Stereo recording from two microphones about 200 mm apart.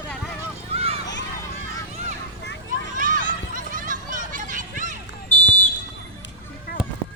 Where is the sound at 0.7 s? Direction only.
30° right (ahead or behind).